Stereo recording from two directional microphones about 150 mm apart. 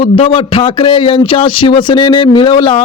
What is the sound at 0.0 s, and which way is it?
Speech, 35° left (ahead or behind).